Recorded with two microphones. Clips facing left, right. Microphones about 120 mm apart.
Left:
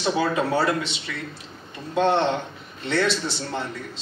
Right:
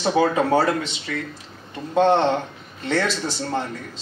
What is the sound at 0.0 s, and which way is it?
A man's voice, 40° right (ahead or behind).